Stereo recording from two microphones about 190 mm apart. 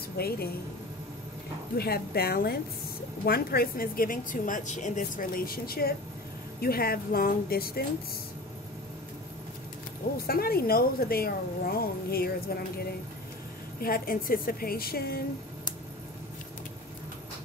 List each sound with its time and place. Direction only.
0.2 s a woman's voice: 55° left (ahead or behind)
1.8 s a woman's voice: 55° left (ahead or behind)
10.2 s a woman's voice: 55° left (ahead or behind)
13.7 s a woman's voice: 50° left (ahead or behind)